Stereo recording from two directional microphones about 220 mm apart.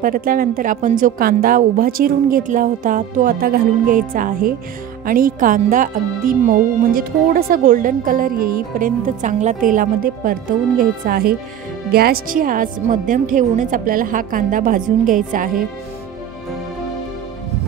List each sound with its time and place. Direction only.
0.0 s speech: 40° right (ahead or behind)